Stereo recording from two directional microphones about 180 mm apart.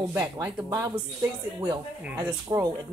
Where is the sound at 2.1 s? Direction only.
15° right (ahead or behind).